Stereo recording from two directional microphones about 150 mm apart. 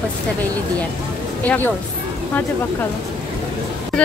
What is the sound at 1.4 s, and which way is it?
Speech, 10° left (ahead or behind).